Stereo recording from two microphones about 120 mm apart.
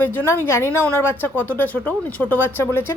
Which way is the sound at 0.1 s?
15° left (ahead or behind).